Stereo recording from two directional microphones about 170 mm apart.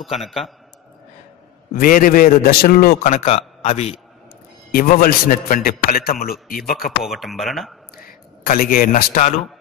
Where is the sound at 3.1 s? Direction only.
40° left (ahead or behind).